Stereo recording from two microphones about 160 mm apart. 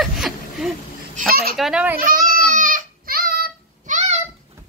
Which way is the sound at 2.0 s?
60° right (ahead or behind).